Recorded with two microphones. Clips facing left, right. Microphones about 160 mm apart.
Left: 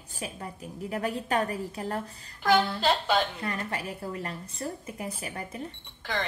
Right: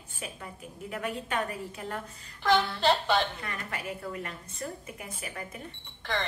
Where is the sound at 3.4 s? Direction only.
35° left (ahead or behind).